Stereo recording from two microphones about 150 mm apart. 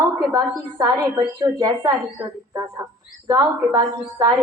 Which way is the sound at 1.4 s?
30° right (ahead or behind).